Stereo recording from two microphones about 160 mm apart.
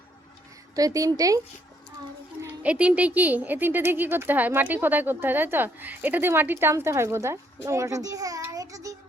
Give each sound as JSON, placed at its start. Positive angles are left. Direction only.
{"t": 0.8, "sound": "a woman's voice", "side_deg": -20}
{"t": 2.4, "sound": "speech", "side_deg": -10}